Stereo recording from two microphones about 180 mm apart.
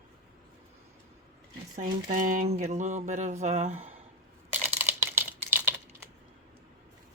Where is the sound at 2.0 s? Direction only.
45° right (ahead or behind).